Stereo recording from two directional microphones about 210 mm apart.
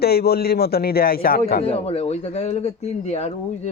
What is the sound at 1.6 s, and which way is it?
Speech, 30° left (ahead or behind).